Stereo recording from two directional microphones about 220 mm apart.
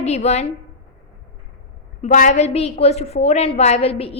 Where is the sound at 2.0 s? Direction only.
35° left (ahead or behind).